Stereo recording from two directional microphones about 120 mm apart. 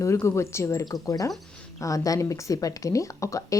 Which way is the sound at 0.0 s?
25° left (ahead or behind).